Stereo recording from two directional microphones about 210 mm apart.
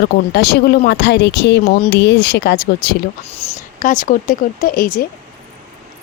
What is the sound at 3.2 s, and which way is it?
Speech, 30° left (ahead or behind).